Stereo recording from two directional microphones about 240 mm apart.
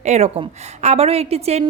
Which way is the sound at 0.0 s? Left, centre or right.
Right.